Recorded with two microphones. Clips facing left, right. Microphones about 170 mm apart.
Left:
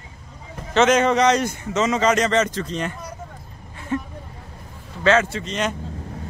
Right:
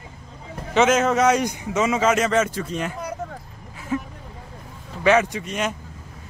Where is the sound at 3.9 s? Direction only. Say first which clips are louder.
Left 1 dB; 5° right (ahead or behind).